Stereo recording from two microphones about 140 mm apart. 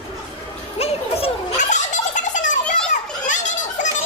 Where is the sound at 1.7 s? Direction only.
60° left (ahead or behind).